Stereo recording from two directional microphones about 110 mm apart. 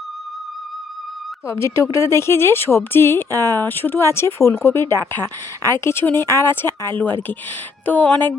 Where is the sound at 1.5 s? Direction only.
25° left (ahead or behind).